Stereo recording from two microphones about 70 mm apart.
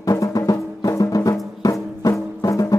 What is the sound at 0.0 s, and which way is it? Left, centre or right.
Music, left.